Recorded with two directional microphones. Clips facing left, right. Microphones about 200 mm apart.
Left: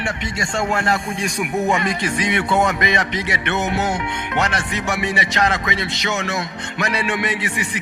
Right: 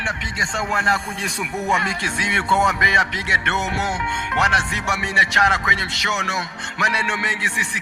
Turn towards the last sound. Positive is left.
turn(degrees=20)  # may be behind; listen again after turning